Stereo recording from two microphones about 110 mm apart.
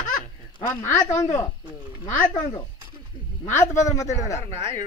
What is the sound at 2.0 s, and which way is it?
Speech, 25° left (ahead or behind).